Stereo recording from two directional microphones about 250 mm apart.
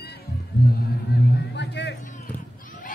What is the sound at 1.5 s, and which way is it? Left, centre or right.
Music, left.